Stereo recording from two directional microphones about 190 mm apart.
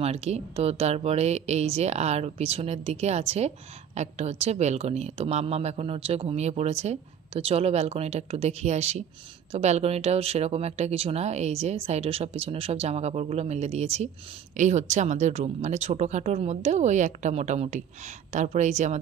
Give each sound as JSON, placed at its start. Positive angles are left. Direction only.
{"t": 0.0, "sound": "speech", "side_deg": -35}